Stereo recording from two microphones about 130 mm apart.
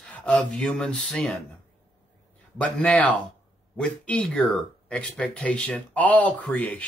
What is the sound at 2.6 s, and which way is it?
Speech, 10° left (ahead or behind).